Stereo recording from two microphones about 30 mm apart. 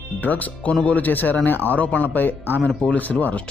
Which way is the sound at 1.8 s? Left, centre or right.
Left.